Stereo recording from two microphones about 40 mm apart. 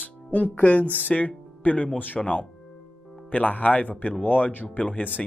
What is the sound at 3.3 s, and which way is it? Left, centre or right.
Speech, left.